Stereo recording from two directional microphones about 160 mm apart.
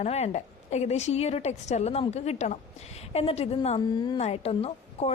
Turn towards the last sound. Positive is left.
turn(degrees=40)  # may be behind; listen again after turning